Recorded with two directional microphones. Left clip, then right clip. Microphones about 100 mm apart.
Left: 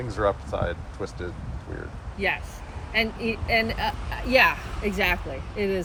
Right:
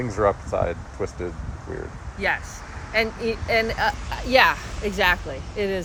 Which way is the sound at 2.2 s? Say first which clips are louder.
Right 2 dB; 35° right (ahead or behind).